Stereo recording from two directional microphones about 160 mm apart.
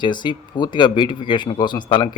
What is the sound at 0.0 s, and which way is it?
A man's voice, 30° left (ahead or behind).